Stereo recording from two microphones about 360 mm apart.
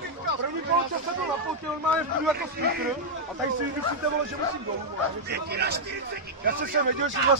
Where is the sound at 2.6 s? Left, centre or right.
Right.